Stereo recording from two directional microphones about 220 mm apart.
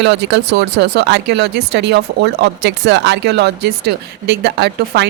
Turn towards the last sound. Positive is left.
turn(degrees=-50)  # may be behind; listen again after turning